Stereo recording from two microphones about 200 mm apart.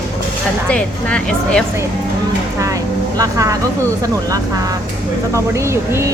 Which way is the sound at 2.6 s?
15° right (ahead or behind).